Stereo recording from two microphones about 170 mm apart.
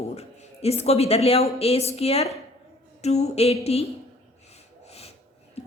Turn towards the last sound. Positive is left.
turn(degrees=35)  # may be behind; listen again after turning